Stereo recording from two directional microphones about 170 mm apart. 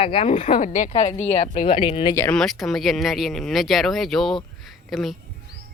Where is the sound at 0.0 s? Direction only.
35° left (ahead or behind).